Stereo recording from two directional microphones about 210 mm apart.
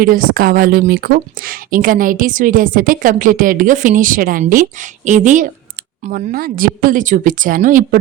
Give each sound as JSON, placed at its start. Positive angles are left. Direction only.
{"t": 0.0, "sound": "a woman's voice", "side_deg": -40}